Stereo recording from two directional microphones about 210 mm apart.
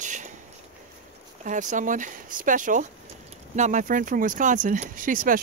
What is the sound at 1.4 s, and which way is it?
Speech, 35° right (ahead or behind).